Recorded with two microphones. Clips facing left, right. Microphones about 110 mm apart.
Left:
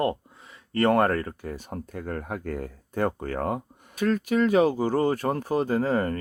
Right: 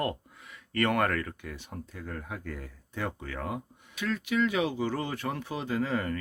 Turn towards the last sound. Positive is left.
turn(degrees=40)  # may be behind; listen again after turning